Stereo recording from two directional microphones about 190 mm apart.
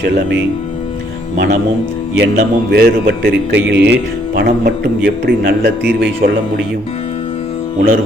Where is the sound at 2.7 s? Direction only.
55° right (ahead or behind).